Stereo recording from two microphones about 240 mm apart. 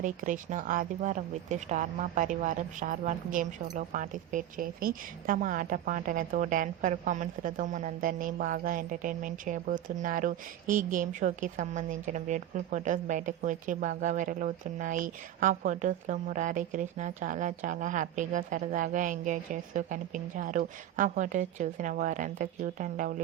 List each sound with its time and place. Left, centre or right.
0.0 s speech: right